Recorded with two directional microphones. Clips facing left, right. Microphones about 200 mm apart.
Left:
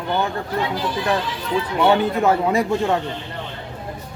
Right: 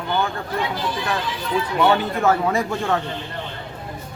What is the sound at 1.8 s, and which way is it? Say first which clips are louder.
A man's voice: left 2 dB; 15° left (ahead or behind).